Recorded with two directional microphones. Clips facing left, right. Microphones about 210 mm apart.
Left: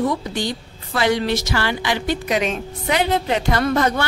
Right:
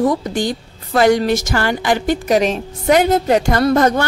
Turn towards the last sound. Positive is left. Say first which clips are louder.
# right 5 dB
turn(degrees=-45)  # may be behind; listen again after turning